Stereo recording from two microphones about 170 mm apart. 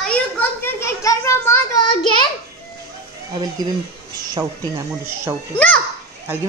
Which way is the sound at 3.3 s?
25° right (ahead or behind).